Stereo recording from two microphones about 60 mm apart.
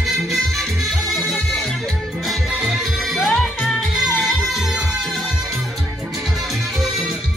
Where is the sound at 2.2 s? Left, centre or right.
Centre.